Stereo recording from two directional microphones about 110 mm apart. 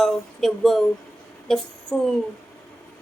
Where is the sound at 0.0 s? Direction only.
5° left (ahead or behind).